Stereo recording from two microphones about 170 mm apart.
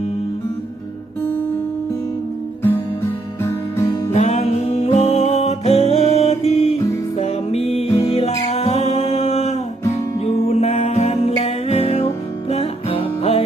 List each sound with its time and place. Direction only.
2.6 s music: 15° left (ahead or behind)
4.1 s music: 40° left (ahead or behind)